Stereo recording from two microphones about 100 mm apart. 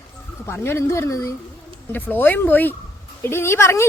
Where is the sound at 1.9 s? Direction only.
20° left (ahead or behind).